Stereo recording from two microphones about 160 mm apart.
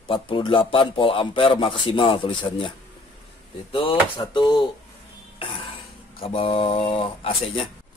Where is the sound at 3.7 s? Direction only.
35° left (ahead or behind).